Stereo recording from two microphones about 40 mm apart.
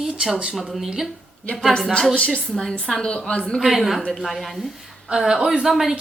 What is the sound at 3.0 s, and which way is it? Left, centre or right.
Speech, left.